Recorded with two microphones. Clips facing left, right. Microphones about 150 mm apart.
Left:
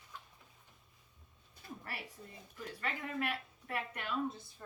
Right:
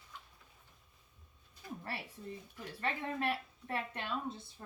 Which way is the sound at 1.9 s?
30° right (ahead or behind).